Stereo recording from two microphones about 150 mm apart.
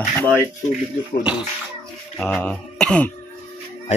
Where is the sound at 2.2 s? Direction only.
5° left (ahead or behind).